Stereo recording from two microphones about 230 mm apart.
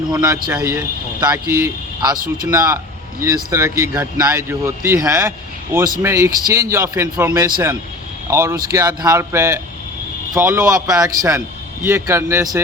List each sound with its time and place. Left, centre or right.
0.1 s speech: centre
2.1 s speech: right
2.5 s a man's voice: centre